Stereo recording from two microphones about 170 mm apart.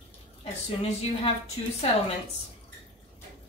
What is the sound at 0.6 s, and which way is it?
Speech, 35° left (ahead or behind).